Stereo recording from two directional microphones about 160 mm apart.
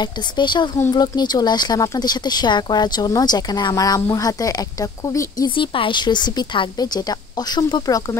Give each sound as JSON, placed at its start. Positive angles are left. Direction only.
{"t": 0.0, "sound": "speech", "side_deg": 30}
{"t": 5.6, "sound": "speech", "side_deg": 30}